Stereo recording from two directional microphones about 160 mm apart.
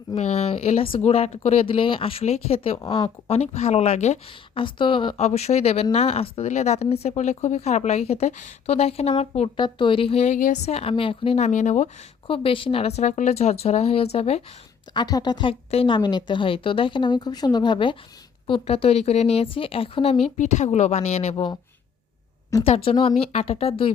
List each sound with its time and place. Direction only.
0.2 s a woman's voice: 45° left (ahead or behind)
4.6 s a woman's voice: 30° left (ahead or behind); by 11.9 s 50° left (ahead or behind)
12.3 s a woman's voice: 35° left (ahead or behind)
14.9 s a woman's voice: 25° left (ahead or behind)
20.4 s speech: 45° left (ahead or behind)
21.3 s a woman's voice: 25° left (ahead or behind)
22.6 s a woman's voice: 35° left (ahead or behind)